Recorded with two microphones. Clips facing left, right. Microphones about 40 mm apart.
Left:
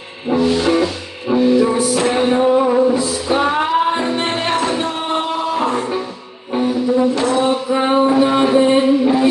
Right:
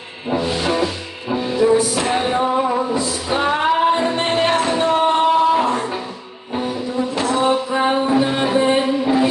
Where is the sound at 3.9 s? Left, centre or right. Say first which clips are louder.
Right 1 dB; centre.